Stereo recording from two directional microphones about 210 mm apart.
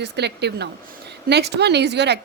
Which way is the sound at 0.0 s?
55° right (ahead or behind).